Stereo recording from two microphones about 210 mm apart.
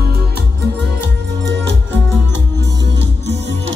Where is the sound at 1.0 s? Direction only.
55° right (ahead or behind).